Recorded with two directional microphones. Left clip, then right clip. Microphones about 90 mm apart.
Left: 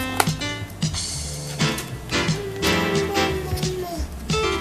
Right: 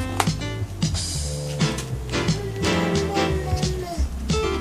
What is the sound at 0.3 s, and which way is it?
Music, 40° left (ahead or behind).